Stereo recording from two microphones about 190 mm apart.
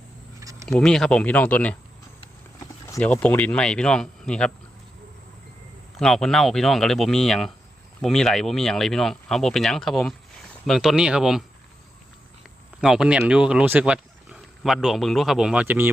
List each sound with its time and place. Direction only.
0.3 s a sound: 15° right (ahead or behind)
0.7 s speech: centre (ahead or behind)
2.8 s speech: 10° left (ahead or behind)
6.0 s speech: centre (ahead or behind)
12.8 s speech: 5° right (ahead or behind)